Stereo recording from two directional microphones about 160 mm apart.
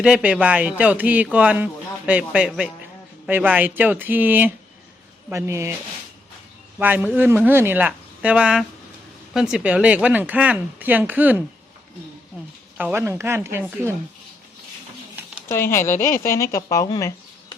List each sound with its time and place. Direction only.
0.0 s a man's voice: 5° right (ahead or behind)
6.7 s a man's voice: 10° right (ahead or behind)
12.7 s a man's voice: 15° right (ahead or behind)
15.4 s a woman's voice: 15° left (ahead or behind)